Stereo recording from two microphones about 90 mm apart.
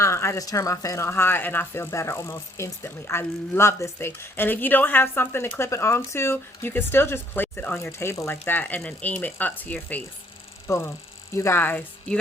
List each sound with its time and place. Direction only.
0.0 s speech: 30° left (ahead or behind)
8.4 s speech: 20° left (ahead or behind)
10.7 s speech: 30° left (ahead or behind)